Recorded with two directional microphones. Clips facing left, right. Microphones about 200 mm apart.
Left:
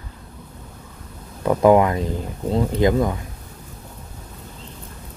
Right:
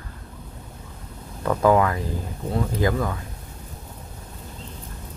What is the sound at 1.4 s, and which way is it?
Speech, 20° left (ahead or behind).